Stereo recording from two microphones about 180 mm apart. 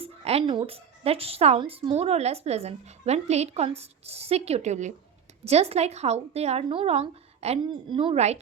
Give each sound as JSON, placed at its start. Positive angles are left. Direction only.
{"t": 0.0, "sound": "a woman's voice", "side_deg": -35}